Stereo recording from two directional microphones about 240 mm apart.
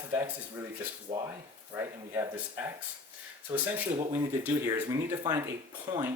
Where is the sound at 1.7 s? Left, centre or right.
Centre.